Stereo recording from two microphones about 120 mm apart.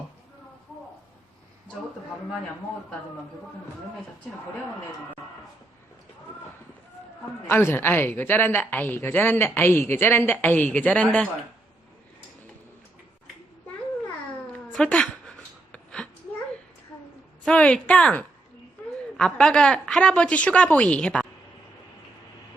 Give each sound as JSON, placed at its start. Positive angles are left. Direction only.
{"t": 7.4, "sound": "a woman's voice", "side_deg": 20}
{"t": 14.7, "sound": "a sound", "side_deg": 5}
{"t": 17.4, "sound": "a woman's voice", "side_deg": 10}